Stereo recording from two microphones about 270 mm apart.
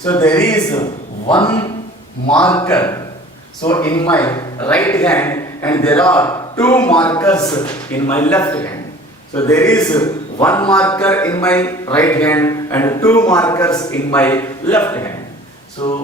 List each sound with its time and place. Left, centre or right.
0.0 s a man's voice: centre